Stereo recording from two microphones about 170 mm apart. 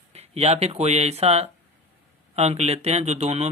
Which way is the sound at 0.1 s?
40° right (ahead or behind).